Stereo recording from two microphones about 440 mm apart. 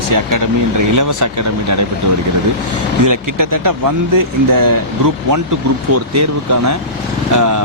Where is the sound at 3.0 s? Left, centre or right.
Right.